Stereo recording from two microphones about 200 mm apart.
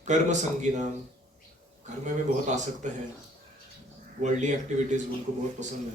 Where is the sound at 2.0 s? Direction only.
35° right (ahead or behind).